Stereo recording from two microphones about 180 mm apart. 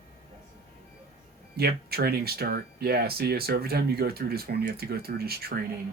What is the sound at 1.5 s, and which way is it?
Speech, 60° right (ahead or behind).